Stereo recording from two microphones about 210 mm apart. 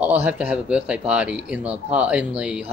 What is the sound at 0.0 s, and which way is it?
A man's voice, 5° right (ahead or behind).